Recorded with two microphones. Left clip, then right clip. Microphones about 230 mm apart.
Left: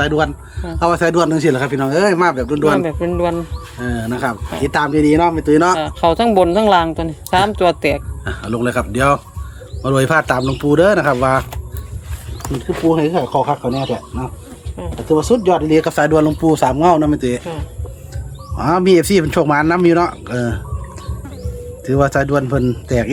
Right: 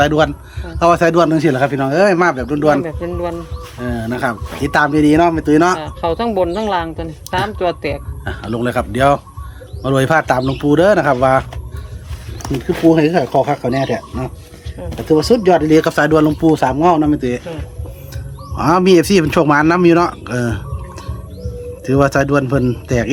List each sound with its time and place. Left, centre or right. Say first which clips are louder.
0.0 s a man's voice: right 3 dB; centre
2.8 s speech: left 4 dB; left
3.8 s speech: right 1 dB; centre
5.8 s speech: left 4 dB; left
8.4 s speech: even; centre
12.4 s speech: right 3 dB; right; by 17.4 s centre
18.5 s speech: right 1 dB; centre
21.8 s speech: right 1 dB; centre